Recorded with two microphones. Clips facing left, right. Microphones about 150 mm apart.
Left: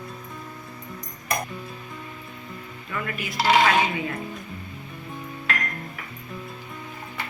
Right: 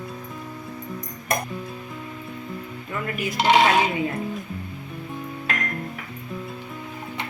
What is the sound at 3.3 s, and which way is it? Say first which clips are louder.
Speech: right 2 dB; 25° right (ahead or behind).